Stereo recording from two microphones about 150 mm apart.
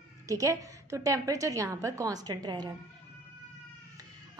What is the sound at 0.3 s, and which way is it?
A woman's voice, 20° right (ahead or behind).